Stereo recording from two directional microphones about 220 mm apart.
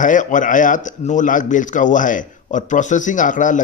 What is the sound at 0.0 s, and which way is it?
Speech, 35° left (ahead or behind).